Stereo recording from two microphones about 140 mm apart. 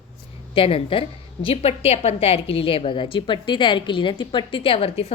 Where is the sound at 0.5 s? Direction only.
40° left (ahead or behind).